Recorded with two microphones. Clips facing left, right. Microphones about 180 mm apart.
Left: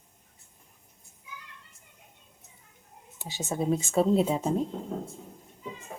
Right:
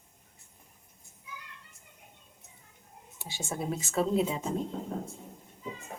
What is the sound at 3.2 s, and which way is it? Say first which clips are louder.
Speech: left 5 dB; 20° left (ahead or behind).